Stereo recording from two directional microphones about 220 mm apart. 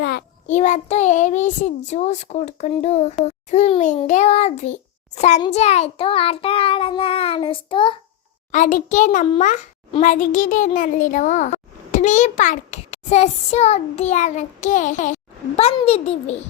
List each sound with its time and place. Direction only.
0.0 s child singing: 45° left (ahead or behind)
0.4 s a child's voice: 35° left (ahead or behind)
8.5 s a child's voice: 35° left (ahead or behind)